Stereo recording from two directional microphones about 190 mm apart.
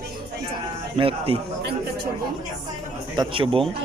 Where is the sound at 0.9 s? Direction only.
30° right (ahead or behind).